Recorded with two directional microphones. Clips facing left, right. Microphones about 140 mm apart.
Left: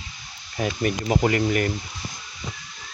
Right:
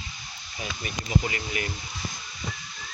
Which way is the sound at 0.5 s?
55° left (ahead or behind).